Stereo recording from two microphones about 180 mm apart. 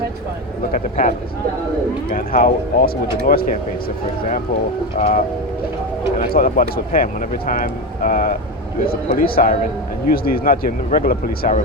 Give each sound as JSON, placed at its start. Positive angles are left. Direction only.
{"t": 0.7, "sound": "speech", "side_deg": 45}
{"t": 4.9, "sound": "a sound", "side_deg": 35}
{"t": 6.1, "sound": "speech", "side_deg": 50}